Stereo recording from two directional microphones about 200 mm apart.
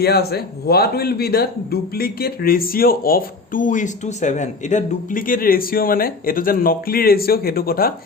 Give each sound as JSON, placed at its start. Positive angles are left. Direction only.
{"t": 0.0, "sound": "a man's voice", "side_deg": 50}